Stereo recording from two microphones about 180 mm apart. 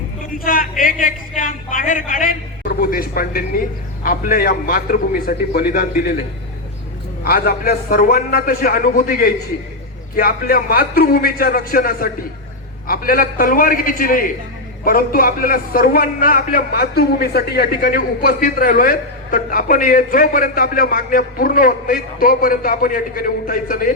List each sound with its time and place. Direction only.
0.4 s a man's voice: 50° left (ahead or behind)
7.3 s a man's voice: 55° left (ahead or behind)